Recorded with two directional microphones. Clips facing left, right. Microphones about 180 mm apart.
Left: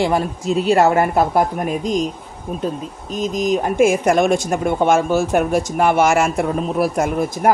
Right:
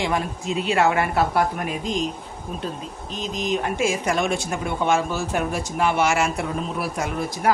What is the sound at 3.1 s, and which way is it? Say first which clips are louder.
Speech: left 7 dB; 45° left (ahead or behind).